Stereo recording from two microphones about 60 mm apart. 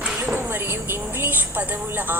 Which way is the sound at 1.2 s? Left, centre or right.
Right.